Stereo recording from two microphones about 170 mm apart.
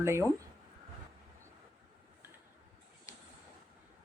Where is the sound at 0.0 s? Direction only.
15° right (ahead or behind).